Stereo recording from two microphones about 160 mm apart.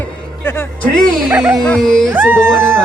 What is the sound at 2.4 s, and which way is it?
Speech, 5° left (ahead or behind).